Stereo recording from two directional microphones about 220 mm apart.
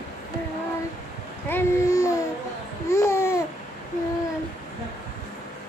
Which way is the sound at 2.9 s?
10° left (ahead or behind).